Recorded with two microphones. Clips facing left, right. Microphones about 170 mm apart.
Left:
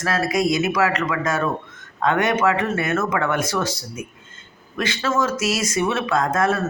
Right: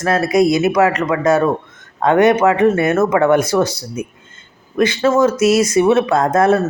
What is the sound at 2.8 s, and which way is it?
Speech, 35° right (ahead or behind).